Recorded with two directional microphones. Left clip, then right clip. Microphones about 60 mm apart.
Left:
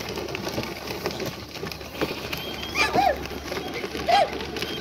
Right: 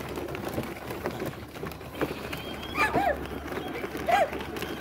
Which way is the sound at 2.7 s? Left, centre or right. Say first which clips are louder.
Left 4 dB; right.